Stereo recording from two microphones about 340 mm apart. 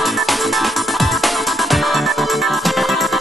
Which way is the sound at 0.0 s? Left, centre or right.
Centre.